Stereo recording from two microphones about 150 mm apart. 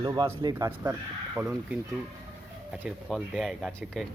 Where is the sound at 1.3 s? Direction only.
10° right (ahead or behind).